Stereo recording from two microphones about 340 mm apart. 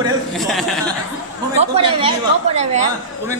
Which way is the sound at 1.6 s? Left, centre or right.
Centre.